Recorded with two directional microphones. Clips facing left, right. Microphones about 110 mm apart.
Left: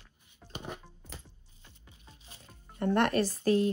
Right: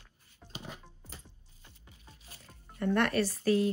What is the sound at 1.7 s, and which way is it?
Music, 20° left (ahead or behind).